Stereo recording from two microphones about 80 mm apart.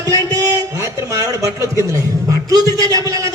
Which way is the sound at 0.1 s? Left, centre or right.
Right.